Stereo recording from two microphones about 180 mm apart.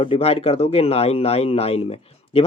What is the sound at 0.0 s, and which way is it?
Speech, 30° left (ahead or behind).